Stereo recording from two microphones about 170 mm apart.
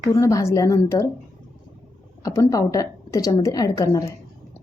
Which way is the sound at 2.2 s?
20° left (ahead or behind).